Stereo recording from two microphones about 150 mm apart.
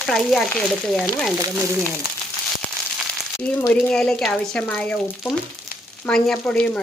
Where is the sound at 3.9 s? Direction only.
5° left (ahead or behind).